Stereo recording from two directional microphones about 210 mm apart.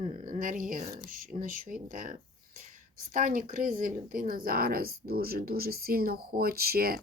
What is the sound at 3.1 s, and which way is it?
A woman's voice, 40° right (ahead or behind).